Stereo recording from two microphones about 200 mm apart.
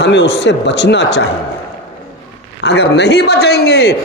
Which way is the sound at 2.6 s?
55° left (ahead or behind).